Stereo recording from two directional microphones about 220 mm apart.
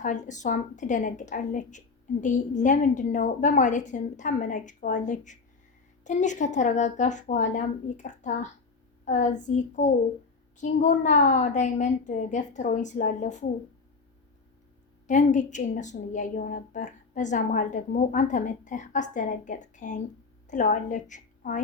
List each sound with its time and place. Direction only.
0.0 s a woman's voice: 35° left (ahead or behind)
15.0 s a woman's voice: 35° left (ahead or behind)